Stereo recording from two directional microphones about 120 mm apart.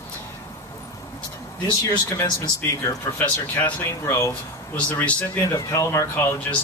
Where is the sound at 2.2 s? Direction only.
35° left (ahead or behind).